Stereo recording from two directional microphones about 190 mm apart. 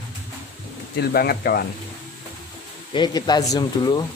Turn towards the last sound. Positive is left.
turn(degrees=20)  # may be behind; listen again after turning